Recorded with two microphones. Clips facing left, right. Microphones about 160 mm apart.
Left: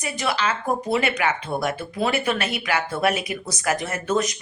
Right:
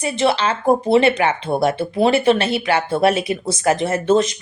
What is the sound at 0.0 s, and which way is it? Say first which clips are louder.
A woman's voice: right 7 dB; 30° right (ahead or behind).